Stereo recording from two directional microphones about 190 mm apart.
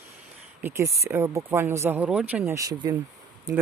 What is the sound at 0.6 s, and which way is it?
Speech, 15° right (ahead or behind).